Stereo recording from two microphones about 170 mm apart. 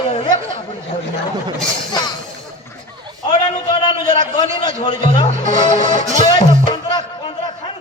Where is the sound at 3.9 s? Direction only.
30° left (ahead or behind).